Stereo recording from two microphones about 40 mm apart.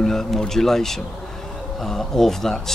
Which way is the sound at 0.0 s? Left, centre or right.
Centre.